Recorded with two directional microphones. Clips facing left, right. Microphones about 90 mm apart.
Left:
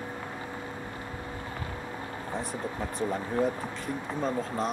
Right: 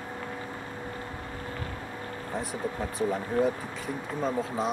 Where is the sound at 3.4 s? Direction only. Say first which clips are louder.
Right 2 dB; 20° left (ahead or behind).